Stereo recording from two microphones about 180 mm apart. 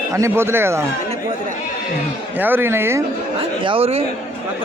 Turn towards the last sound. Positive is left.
turn(degrees=-30)  # may be behind; listen again after turning